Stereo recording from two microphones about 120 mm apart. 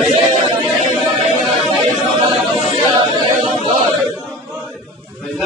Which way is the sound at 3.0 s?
45° right (ahead or behind).